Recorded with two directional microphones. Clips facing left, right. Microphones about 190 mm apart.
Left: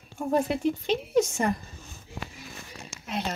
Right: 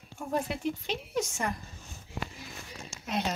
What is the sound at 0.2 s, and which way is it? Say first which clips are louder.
Speech: left 7 dB; 30° left (ahead or behind).